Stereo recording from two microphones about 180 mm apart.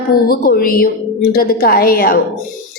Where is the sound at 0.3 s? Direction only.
55° left (ahead or behind).